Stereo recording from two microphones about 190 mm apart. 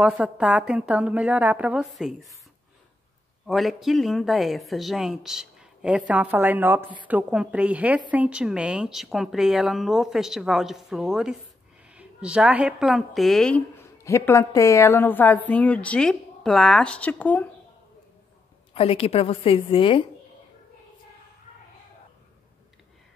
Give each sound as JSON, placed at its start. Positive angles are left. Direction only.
{"t": 0.0, "sound": "a woman's voice", "side_deg": -5}
{"t": 3.4, "sound": "a woman's voice", "side_deg": 0}
{"t": 14.0, "sound": "a woman's voice", "side_deg": 15}
{"t": 18.7, "sound": "a woman's voice", "side_deg": 30}